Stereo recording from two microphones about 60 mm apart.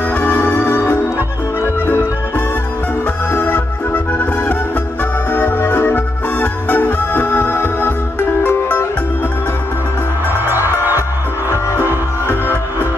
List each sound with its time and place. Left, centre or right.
0.1 s music: left
3.3 s music: left
5.9 s music: left
10.5 s music: right